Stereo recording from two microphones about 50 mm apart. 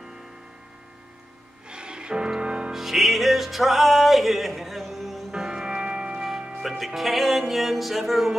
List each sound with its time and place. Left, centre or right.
1.7 s music: centre
2.7 s music: centre
5.3 s music: centre
6.8 s music: centre